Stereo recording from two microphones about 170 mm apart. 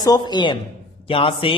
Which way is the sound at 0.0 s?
25° left (ahead or behind).